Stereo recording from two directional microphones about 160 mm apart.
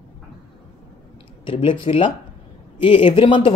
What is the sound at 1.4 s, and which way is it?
Speech, 35° left (ahead or behind).